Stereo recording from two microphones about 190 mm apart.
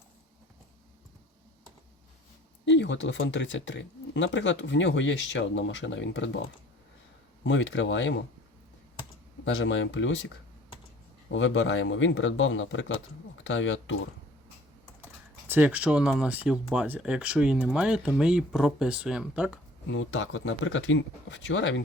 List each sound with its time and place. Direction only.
2.6 s speech: 70° left (ahead or behind)
7.4 s speech: 75° left (ahead or behind)
9.4 s speech: 75° left (ahead or behind)
15.4 s speech: 10° right (ahead or behind)
19.9 s speech: 80° left